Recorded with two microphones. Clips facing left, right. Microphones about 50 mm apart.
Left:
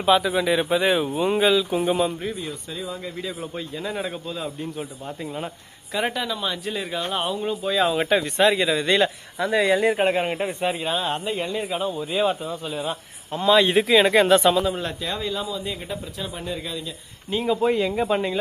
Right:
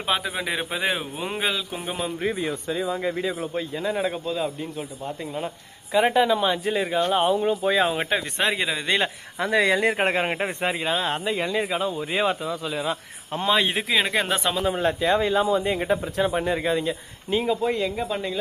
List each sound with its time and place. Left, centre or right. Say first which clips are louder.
0.0 s speech: left 7 dB; centre
2.3 s speech: right 5 dB; right
3.4 s speech: right 3 dB; centre
5.9 s speech: right 5 dB; centre
6.1 s speech: right 7 dB; right
8.7 s speech: left 4 dB; centre
9.5 s speech: left 1 dB; right
11.9 s speech: left 1 dB; right
13.5 s speech: left 6 dB; centre
14.6 s speech: right 3 dB; right
17.3 s speech: even; centre
17.7 s speech: left 3 dB; centre